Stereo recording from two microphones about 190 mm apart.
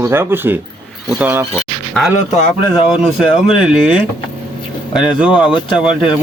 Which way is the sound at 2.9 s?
5° right (ahead or behind).